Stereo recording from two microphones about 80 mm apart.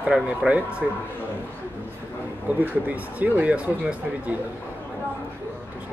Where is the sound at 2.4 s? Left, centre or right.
Centre.